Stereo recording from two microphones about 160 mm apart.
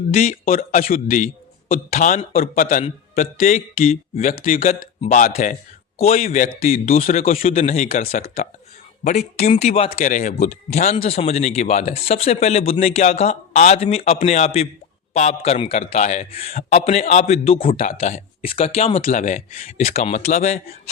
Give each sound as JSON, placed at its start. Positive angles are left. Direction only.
{"t": 0.4, "sound": "a man's voice", "side_deg": 60}
{"t": 3.2, "sound": "speech", "side_deg": 45}
{"t": 6.0, "sound": "speech", "side_deg": 40}
{"t": 6.2, "sound": "a man's voice", "side_deg": 55}
{"t": 9.0, "sound": "speech", "side_deg": 45}
{"t": 10.0, "sound": "speech", "side_deg": 55}
{"t": 17.8, "sound": "speech", "side_deg": 50}
{"t": 18.4, "sound": "speech", "side_deg": 35}
{"t": 19.0, "sound": "speech", "side_deg": 50}